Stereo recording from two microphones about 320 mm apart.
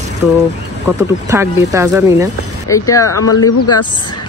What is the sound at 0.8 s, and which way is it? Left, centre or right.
Speech, centre.